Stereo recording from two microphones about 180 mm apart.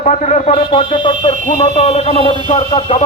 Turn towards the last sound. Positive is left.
turn(degrees=35)  # may be behind; listen again after turning